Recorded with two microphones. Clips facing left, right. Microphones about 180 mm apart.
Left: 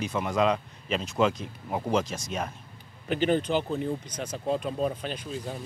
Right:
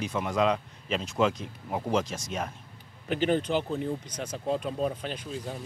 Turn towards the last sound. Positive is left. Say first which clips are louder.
# left 1 dB
turn(degrees=20)  # may be behind; listen again after turning